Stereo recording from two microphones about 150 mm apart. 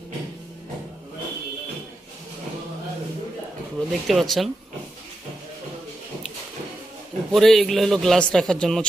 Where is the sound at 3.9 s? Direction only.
Centre (ahead or behind).